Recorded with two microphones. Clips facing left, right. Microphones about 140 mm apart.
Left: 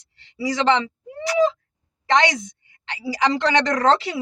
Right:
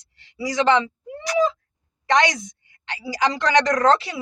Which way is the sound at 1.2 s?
25° left (ahead or behind).